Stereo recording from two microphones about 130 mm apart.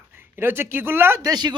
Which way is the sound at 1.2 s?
30° right (ahead or behind).